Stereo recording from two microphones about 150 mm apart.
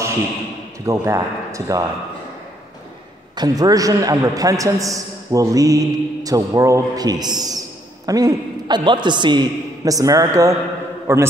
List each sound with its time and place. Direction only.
0.8 s a man's voice: 20° right (ahead or behind)
3.3 s a man's voice: 25° right (ahead or behind)